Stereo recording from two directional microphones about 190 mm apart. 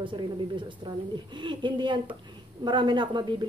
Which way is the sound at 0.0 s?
25° right (ahead or behind).